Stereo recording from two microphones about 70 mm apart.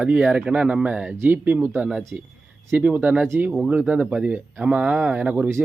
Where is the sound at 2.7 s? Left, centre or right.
Right.